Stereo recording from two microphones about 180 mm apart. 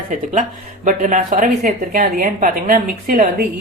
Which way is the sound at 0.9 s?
40° right (ahead or behind).